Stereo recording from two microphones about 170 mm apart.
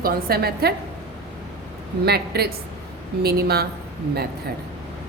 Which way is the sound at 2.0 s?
70° right (ahead or behind).